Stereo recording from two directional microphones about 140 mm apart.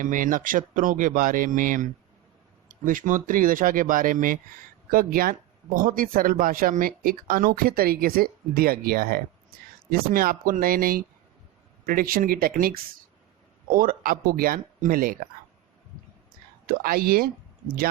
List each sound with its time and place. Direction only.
0.0 s speech: 70° right (ahead or behind)
4.9 s speech: 90° right
16.6 s speech: 90° right